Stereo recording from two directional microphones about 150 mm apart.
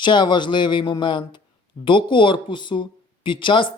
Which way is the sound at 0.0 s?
30° left (ahead or behind).